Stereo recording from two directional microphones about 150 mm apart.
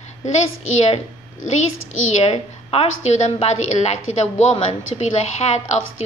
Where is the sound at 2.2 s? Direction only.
40° left (ahead or behind).